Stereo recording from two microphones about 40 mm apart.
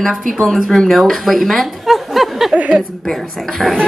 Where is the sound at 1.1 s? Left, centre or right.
Centre.